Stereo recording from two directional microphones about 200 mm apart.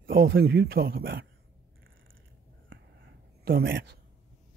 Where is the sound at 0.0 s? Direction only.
50° right (ahead or behind).